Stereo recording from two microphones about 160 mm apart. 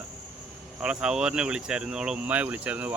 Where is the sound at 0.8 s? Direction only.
5° right (ahead or behind).